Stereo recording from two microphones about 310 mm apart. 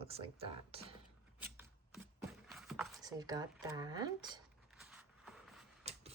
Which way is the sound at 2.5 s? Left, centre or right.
Centre.